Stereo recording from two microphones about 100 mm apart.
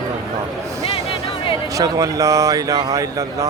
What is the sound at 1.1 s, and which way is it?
Music, 65° left (ahead or behind).